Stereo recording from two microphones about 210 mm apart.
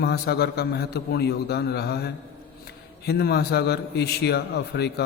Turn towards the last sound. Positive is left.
turn(degrees=50)  # may be behind; listen again after turning